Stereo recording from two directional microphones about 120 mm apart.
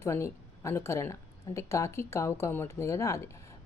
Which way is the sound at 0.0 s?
25° left (ahead or behind).